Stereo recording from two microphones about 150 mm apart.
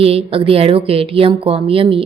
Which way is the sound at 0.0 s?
40° right (ahead or behind).